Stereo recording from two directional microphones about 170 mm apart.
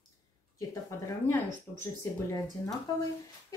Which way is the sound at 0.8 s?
15° left (ahead or behind).